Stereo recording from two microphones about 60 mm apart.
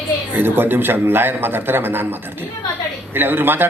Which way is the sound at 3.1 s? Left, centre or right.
Right.